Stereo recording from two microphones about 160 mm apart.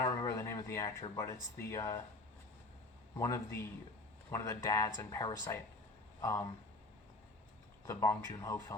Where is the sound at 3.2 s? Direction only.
15° left (ahead or behind).